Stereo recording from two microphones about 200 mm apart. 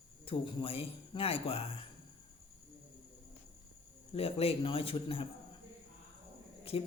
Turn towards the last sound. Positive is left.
turn(degrees=30)  # may be behind; listen again after turning